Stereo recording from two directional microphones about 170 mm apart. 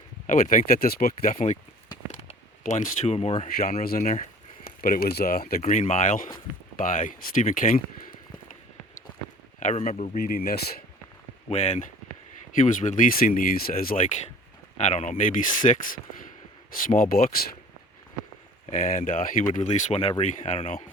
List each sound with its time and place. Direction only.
0.3 s speech: 50° left (ahead or behind)
3.6 s speech: 55° left (ahead or behind)
9.6 s speech: 45° left (ahead or behind)
10.2 s speech: 60° left (ahead or behind)
11.4 s speech: 40° left (ahead or behind); by 14.0 s 60° left (ahead or behind)
14.8 s speech: 45° left (ahead or behind)
16.8 s speech: 55° left (ahead or behind)
18.6 s speech: 50° left (ahead or behind)
19.5 s speech: 40° left (ahead or behind)